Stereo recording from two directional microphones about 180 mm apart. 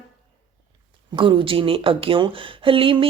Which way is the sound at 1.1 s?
30° right (ahead or behind).